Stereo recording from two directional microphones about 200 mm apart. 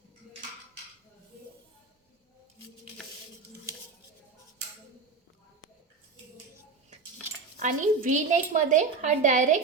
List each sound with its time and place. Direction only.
7.6 s a woman's voice: 40° right (ahead or behind)